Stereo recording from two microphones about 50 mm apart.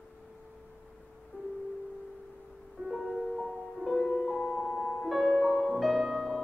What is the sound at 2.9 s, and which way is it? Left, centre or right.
Music, centre.